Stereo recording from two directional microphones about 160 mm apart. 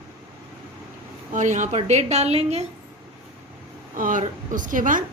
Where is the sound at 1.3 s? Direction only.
50° right (ahead or behind).